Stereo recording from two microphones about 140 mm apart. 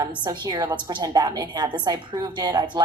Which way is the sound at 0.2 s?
25° right (ahead or behind).